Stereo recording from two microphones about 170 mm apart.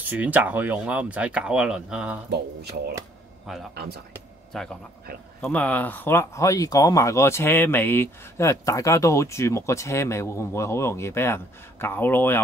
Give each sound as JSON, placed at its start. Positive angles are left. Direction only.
{"t": 0.0, "sound": "speech", "side_deg": -10}
{"t": 4.5, "sound": "speech", "side_deg": 5}